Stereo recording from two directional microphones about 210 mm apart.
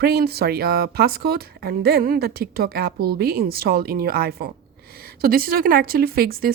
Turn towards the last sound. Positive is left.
turn(degrees=-45)  # may be behind; listen again after turning